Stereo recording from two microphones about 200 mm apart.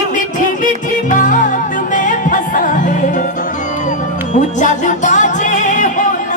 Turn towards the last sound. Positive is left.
turn(degrees=40)  # may be behind; listen again after turning